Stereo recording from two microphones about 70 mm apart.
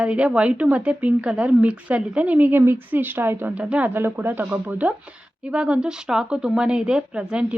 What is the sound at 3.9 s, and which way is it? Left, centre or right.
A woman's voice, right.